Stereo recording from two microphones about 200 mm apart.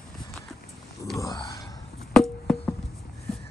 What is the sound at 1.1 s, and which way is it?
Speech, 15° left (ahead or behind).